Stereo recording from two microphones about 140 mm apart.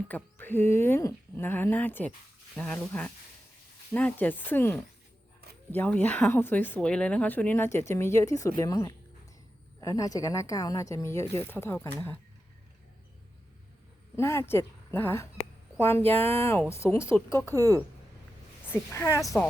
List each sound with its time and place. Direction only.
0.1 s a woman's voice: 15° left (ahead or behind)
14.2 s a woman's voice: 20° left (ahead or behind)
17.5 s speech: 25° right (ahead or behind)
18.7 s speech: 20° left (ahead or behind)